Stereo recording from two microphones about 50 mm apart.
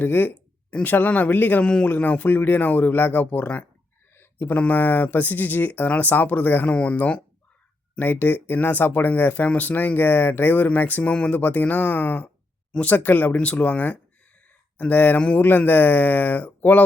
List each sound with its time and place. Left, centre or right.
0.0 s speech: left
0.7 s speech: left
1.6 s speech: left
1.9 s speech: left
4.1 s a sound: left
4.5 s speech: left
6.7 s speech: left
7.9 s speech: left